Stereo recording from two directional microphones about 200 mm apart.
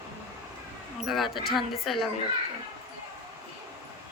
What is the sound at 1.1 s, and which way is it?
Speech, centre (ahead or behind).